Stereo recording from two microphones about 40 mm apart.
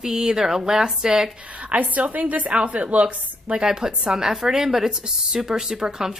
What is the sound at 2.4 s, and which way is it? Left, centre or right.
Speech, right.